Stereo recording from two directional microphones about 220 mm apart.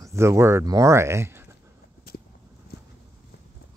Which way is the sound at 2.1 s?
45° left (ahead or behind).